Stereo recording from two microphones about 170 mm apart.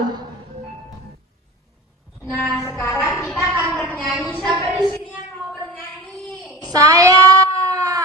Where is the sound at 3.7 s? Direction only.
5° left (ahead or behind).